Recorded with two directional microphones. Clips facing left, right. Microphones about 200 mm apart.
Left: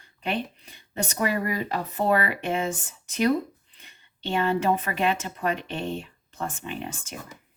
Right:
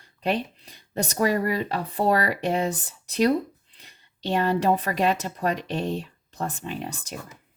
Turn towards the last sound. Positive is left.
turn(degrees=-40)  # may be behind; listen again after turning